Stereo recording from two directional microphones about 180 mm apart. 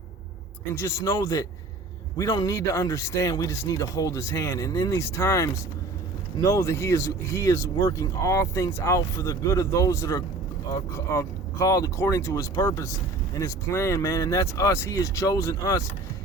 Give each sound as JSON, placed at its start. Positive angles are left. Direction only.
{"t": 0.7, "sound": "speech", "side_deg": 15}